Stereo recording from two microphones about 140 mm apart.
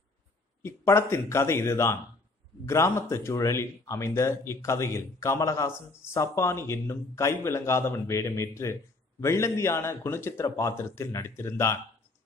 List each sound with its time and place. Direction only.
0.6 s speech: 20° left (ahead or behind)